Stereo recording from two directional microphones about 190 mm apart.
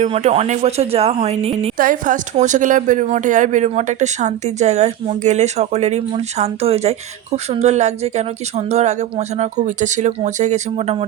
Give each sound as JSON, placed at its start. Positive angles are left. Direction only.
{"t": 0.0, "sound": "speech", "side_deg": -35}
{"t": 1.8, "sound": "speech", "side_deg": -45}